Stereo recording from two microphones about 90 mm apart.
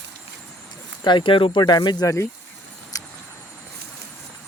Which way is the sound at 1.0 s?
60° left (ahead or behind).